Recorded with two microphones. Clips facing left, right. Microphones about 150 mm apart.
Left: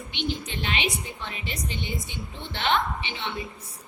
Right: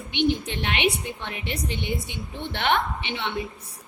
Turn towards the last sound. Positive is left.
turn(degrees=-65)  # may be behind; listen again after turning